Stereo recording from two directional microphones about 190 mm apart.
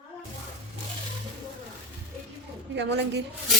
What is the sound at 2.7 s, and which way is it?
Speech, 65° right (ahead or behind).